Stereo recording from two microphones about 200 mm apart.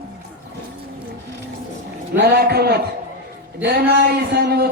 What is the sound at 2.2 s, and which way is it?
A man's voice, 50° right (ahead or behind).